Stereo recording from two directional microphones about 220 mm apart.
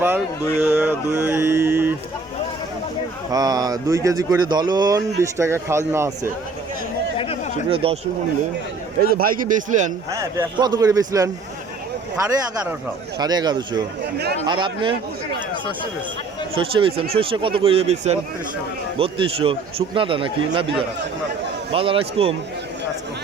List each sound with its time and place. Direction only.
0.0 s speech: 10° right (ahead or behind)
3.3 s speech: 15° right (ahead or behind)
7.7 s a man's voice: 25° right (ahead or behind)
9.0 s a man's voice: 40° right (ahead or behind)
10.1 s speech: 15° right (ahead or behind)
13.1 s a man's voice: 20° right (ahead or behind)
16.6 s a man's voice: 25° right (ahead or behind)